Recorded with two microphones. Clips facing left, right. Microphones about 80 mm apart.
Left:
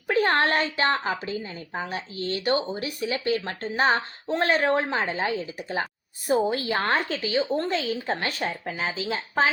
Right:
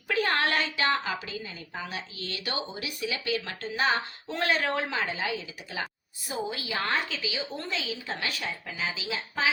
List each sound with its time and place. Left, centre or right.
0.1 s a woman's voice: left